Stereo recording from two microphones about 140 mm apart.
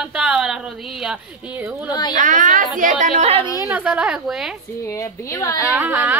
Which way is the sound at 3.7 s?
10° right (ahead or behind).